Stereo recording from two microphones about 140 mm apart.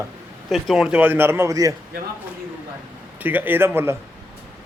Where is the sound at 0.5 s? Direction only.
5° right (ahead or behind); by 1.7 s 25° right (ahead or behind).